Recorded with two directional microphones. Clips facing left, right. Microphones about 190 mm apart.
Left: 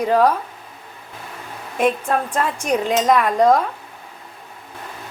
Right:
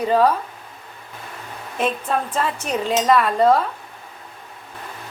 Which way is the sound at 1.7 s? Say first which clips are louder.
Left 3 dB; 10° left (ahead or behind).